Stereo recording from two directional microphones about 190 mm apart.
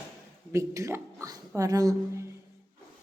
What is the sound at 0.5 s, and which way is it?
Speech, 15° right (ahead or behind).